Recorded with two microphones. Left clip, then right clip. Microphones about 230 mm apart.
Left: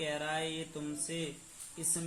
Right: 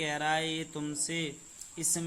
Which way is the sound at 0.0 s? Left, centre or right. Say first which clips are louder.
Right 5 dB; right.